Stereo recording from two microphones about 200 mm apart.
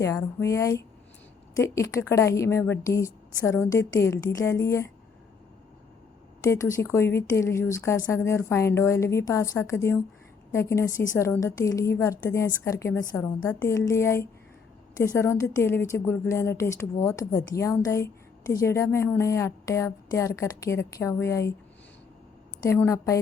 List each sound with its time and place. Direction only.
0.0 s speech: 15° left (ahead or behind)
6.5 s speech: 15° left (ahead or behind)
22.6 s speech: 15° left (ahead or behind)